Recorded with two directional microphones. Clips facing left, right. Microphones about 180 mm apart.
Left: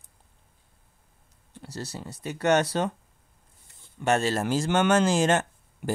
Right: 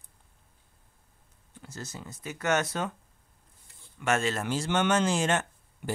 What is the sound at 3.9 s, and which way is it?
Speech, 35° left (ahead or behind).